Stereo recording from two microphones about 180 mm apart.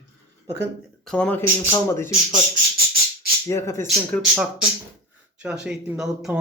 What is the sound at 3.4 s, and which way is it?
Speech, 15° left (ahead or behind).